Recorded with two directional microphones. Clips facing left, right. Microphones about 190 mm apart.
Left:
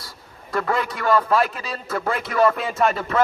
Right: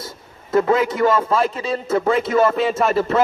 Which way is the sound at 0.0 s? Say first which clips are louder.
Right 7 dB; 20° right (ahead or behind).